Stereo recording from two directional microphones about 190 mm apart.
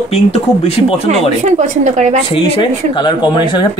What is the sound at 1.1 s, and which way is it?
A woman's voice, 40° right (ahead or behind).